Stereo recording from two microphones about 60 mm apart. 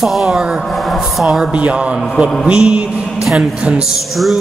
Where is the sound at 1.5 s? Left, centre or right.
Centre.